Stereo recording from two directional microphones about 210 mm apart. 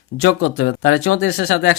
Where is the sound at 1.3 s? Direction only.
55° left (ahead or behind).